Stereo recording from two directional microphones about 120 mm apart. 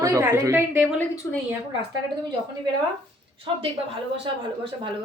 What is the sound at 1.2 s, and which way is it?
Speech, 20° left (ahead or behind).